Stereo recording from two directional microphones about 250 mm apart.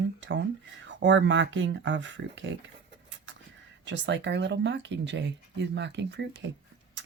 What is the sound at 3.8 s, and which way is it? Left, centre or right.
Speech, right.